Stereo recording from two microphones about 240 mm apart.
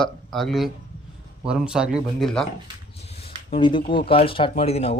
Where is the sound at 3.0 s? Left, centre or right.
Left.